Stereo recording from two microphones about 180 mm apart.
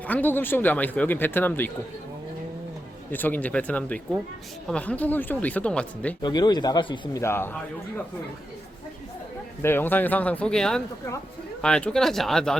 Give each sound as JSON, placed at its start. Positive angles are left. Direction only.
{"t": 0.1, "sound": "speech", "side_deg": 10}
{"t": 3.1, "sound": "speech", "side_deg": 10}
{"t": 6.2, "sound": "speech", "side_deg": 25}
{"t": 7.2, "sound": "speech", "side_deg": 15}
{"t": 9.6, "sound": "speech", "side_deg": 10}